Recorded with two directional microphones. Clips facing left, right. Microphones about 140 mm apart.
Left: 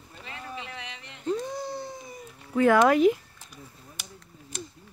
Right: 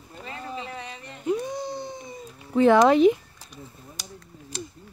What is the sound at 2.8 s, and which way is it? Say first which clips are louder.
Speech: right 3 dB; 20° right (ahead or behind).